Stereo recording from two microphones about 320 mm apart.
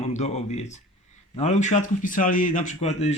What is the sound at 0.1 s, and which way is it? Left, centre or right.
Speech, left.